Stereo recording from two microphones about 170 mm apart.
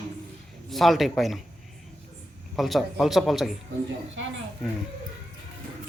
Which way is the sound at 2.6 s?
Centre (ahead or behind).